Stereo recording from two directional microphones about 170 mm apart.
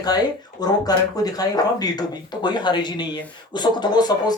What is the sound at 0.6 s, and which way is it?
Speech, 20° left (ahead or behind).